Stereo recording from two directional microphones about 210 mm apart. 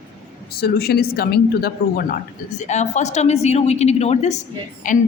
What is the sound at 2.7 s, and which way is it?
A woman's voice, 35° left (ahead or behind).